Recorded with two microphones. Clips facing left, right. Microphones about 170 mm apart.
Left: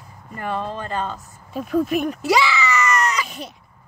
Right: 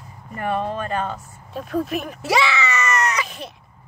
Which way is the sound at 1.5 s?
Centre (ahead or behind).